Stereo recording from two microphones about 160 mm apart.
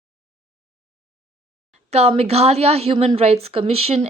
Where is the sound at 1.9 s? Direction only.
40° right (ahead or behind).